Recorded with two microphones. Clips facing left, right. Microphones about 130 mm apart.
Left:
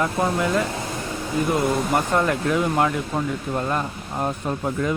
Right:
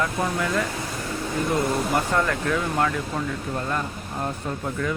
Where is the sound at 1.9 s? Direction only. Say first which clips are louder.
Left 2 dB; 20° left (ahead or behind).